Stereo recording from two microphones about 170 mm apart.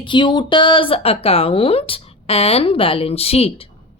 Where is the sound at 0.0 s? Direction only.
30° left (ahead or behind).